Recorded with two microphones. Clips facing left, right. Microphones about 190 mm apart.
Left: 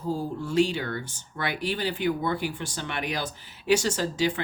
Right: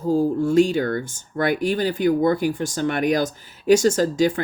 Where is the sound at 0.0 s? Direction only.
45° right (ahead or behind).